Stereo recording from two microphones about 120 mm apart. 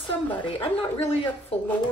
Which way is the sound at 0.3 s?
45° left (ahead or behind).